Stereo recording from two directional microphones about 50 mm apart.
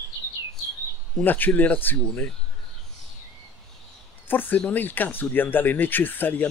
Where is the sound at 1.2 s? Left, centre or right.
Left.